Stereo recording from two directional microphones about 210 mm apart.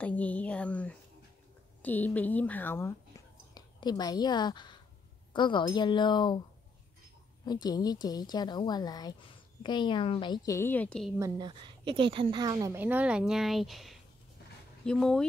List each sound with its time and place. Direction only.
0.0 s a woman's voice: 5° left (ahead or behind)
7.4 s a woman's voice: 20° left (ahead or behind); by 11.1 s centre (ahead or behind)
11.1 s a woman's voice: 20° right (ahead or behind); by 15.2 s 5° left (ahead or behind)